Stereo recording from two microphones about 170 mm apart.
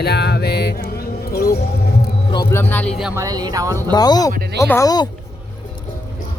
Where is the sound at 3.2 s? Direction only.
20° right (ahead or behind).